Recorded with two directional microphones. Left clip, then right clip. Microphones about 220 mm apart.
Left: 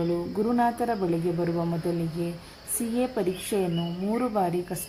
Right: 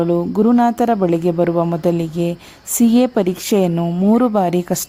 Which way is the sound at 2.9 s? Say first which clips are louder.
Right 9 dB; 50° right (ahead or behind).